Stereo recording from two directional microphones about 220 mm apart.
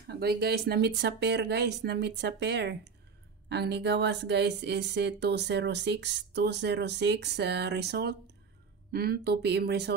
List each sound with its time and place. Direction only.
0.1 s speech: 45° right (ahead or behind)